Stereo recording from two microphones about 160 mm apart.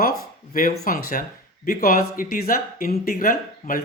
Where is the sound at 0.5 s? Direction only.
60° left (ahead or behind).